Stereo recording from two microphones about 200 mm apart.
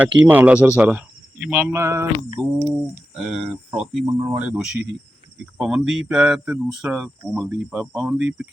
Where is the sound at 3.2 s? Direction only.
Centre (ahead or behind).